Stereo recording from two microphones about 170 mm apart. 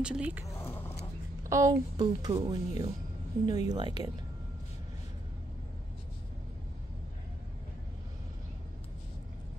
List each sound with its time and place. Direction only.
0.0 s speech: 5° right (ahead or behind)
0.5 s a sound: 15° left (ahead or behind)
1.4 s speech: 20° right (ahead or behind)